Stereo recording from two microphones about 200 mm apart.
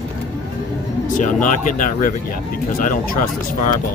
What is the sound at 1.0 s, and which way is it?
Speech, 40° left (ahead or behind).